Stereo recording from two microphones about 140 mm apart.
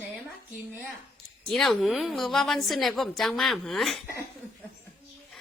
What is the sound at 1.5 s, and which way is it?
A woman's voice, centre (ahead or behind).